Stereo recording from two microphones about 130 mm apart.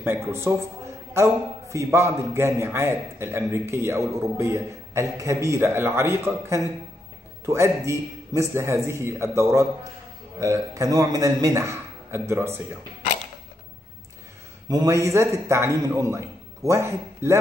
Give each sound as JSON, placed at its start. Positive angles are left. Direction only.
{"t": 0.0, "sound": "a man's voice", "side_deg": -20}
{"t": 14.7, "sound": "a man's voice", "side_deg": -25}